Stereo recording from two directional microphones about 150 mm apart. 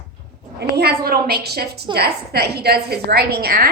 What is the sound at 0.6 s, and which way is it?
A woman's voice, 90° right.